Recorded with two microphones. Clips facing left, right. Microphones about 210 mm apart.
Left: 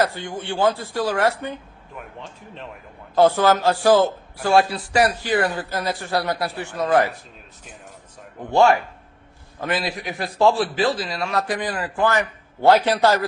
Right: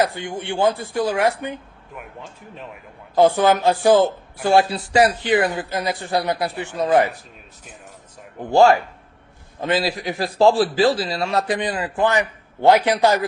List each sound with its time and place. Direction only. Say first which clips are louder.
0.0 s speech: right 1 dB; 15° right (ahead or behind)
2.0 s speech: even; 5° right (ahead or behind)
3.2 s a man's voice: right 1 dB; 15° right (ahead or behind)
8.4 s a man's voice: right 2 dB; 30° right (ahead or behind); by 13.2 s 15° right (ahead or behind)